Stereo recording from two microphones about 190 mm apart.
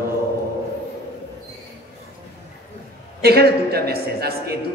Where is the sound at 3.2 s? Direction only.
55° right (ahead or behind).